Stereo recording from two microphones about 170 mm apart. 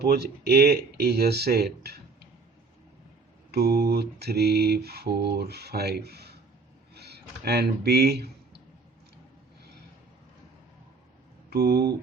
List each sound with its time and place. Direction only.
0.0 s mantra: 70° right (ahead or behind)
3.5 s mantra: 70° right (ahead or behind)
6.9 s speech: 75° right (ahead or behind)
11.5 s mantra: 70° right (ahead or behind)